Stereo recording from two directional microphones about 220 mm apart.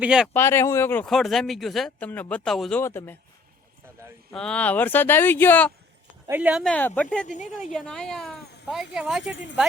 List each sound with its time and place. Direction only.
0.0 s speech: 5° right (ahead or behind)
0.3 s speech: 10° left (ahead or behind)
4.3 s speech: 5° left (ahead or behind)
6.2 s speech: 10° right (ahead or behind)
7.3 s a woman's voice: 35° left (ahead or behind)
7.7 s speech: centre (ahead or behind)
9.3 s speech: 55° left (ahead or behind)